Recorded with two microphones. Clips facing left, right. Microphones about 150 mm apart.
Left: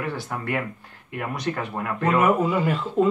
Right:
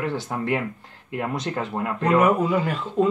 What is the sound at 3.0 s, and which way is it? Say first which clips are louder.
Speech: even; 5° left (ahead or behind).